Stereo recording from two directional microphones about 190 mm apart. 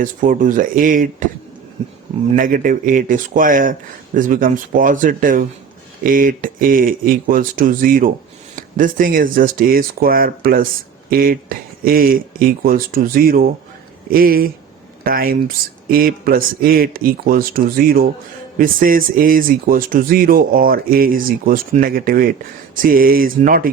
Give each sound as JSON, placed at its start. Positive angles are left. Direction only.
{"t": 0.0, "sound": "speech", "side_deg": -45}
{"t": 2.3, "sound": "speech", "side_deg": -45}